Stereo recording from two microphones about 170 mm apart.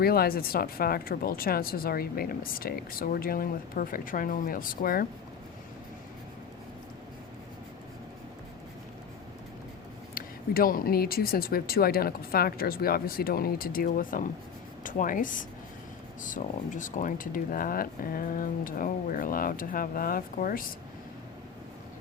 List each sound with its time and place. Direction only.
0.0 s speech: 60° left (ahead or behind)
10.2 s speech: 60° left (ahead or behind)